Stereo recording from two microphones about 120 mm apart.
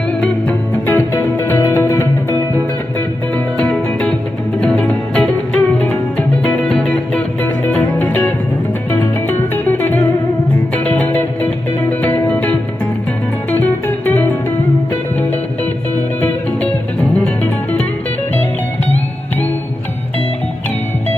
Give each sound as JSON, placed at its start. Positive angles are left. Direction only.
{"t": 0.2, "sound": "music", "side_deg": 15}
{"t": 3.5, "sound": "music", "side_deg": 5}
{"t": 9.7, "sound": "music", "side_deg": 15}
{"t": 16.2, "sound": "music", "side_deg": 15}